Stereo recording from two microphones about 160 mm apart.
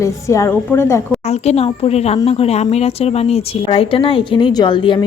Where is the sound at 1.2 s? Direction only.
40° left (ahead or behind).